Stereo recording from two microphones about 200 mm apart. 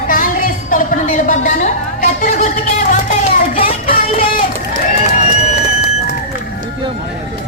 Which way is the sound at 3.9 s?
45° left (ahead or behind).